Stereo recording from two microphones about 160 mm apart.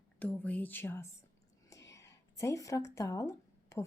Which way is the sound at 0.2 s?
10° left (ahead or behind).